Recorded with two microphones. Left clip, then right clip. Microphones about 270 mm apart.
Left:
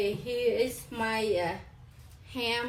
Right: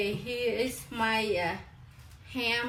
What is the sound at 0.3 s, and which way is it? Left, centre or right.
Speech, centre.